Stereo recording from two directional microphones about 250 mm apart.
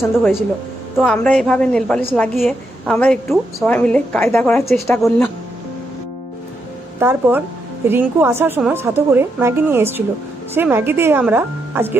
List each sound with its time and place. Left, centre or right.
0.9 s a woman's voice: centre
7.0 s a woman's voice: centre